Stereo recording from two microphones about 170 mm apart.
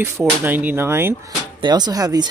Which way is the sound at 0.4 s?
10° right (ahead or behind).